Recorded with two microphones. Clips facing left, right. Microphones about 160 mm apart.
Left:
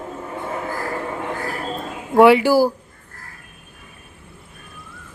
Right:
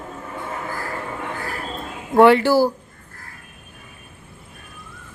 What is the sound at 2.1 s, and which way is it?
Speech, 10° left (ahead or behind).